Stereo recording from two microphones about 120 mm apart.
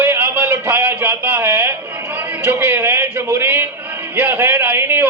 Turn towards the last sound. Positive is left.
turn(degrees=-20)  # may be behind; listen again after turning